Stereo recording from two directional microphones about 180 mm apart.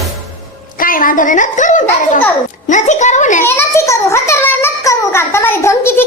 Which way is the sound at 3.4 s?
15° left (ahead or behind).